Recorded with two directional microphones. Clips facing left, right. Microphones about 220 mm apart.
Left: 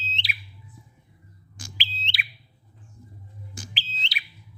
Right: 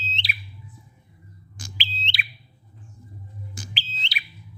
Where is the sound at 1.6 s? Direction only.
10° left (ahead or behind).